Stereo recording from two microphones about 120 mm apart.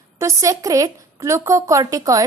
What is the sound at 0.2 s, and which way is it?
A woman's voice, 25° right (ahead or behind).